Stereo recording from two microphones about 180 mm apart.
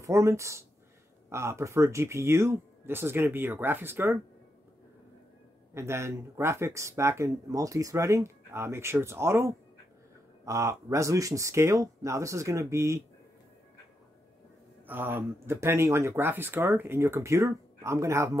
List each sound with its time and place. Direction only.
0.0 s speech: 15° right (ahead or behind)
5.8 s speech: 15° right (ahead or behind)
14.9 s speech: 10° right (ahead or behind)